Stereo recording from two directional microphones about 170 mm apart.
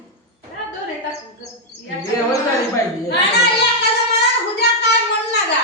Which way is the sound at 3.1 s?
75° left (ahead or behind).